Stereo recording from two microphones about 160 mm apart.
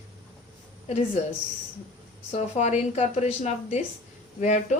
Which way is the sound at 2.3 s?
45° left (ahead or behind).